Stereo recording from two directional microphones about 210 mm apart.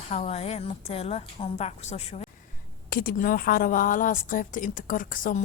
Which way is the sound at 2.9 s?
45° left (ahead or behind).